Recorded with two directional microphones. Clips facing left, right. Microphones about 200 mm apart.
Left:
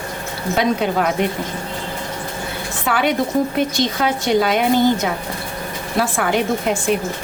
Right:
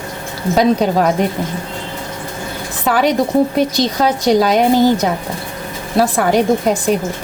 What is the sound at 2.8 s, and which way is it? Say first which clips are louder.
Speech: right 4 dB; 40° right (ahead or behind).